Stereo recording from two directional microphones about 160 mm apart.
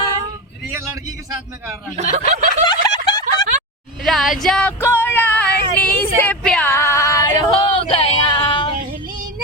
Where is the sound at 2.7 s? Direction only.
25° left (ahead or behind).